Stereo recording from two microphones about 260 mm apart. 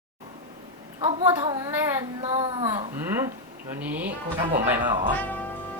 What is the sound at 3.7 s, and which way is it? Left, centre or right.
Speech, centre.